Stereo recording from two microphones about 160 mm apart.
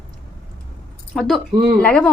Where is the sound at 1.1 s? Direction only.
5° left (ahead or behind).